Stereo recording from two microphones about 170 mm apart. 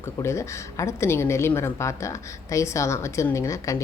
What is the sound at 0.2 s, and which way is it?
A woman's voice, 15° left (ahead or behind).